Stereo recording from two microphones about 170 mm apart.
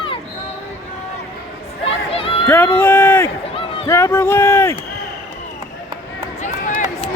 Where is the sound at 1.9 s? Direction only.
35° left (ahead or behind).